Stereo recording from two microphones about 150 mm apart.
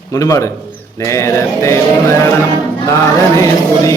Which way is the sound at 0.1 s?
25° left (ahead or behind).